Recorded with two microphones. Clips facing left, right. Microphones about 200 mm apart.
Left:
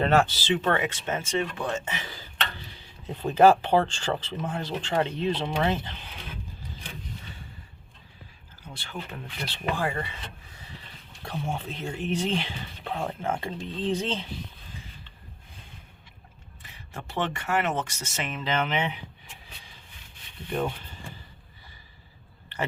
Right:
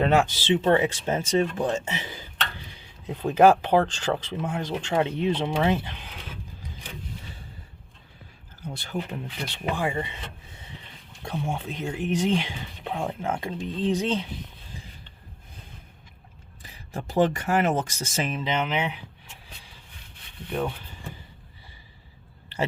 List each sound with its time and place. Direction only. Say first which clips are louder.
0.0 s speech: right 1 dB; 10° right (ahead or behind)
3.1 s speech: right 1 dB; 10° right (ahead or behind)
8.6 s speech: right 7 dB; 45° right (ahead or behind)
9.0 s speech: right 5 dB; 20° right (ahead or behind)
9.7 s a sound: right 4 dB; 15° right (ahead or behind)
11.2 s speech: right 2 dB; 10° right (ahead or behind)
16.6 s speech: right 5 dB; 35° right (ahead or behind)
18.4 s speech: left 3 dB; 15° right (ahead or behind)
20.5 s speech: even; centre (ahead or behind)